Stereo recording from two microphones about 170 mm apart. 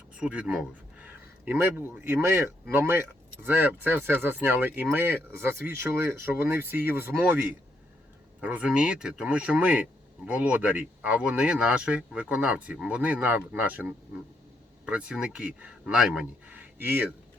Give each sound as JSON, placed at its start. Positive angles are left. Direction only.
{"t": 0.1, "sound": "speech", "side_deg": -5}
{"t": 8.4, "sound": "speech", "side_deg": -10}